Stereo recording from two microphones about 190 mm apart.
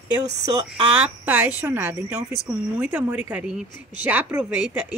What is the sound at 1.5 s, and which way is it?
A woman's voice, 10° right (ahead or behind).